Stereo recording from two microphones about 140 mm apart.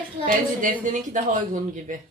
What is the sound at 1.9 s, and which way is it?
Speech, 70° right (ahead or behind).